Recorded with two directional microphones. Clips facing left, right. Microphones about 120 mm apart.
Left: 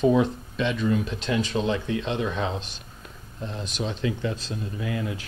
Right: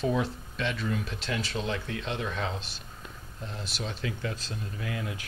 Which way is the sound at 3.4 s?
5° right (ahead or behind).